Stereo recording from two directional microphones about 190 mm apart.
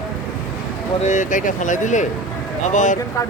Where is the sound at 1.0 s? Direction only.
40° left (ahead or behind).